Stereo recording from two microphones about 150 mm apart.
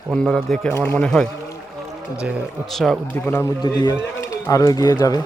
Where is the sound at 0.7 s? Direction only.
20° left (ahead or behind).